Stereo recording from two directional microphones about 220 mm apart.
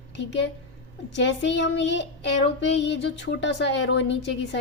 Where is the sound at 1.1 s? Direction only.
55° left (ahead or behind).